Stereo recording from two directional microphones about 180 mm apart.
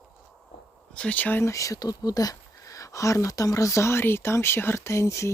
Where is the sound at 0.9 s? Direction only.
5° left (ahead or behind).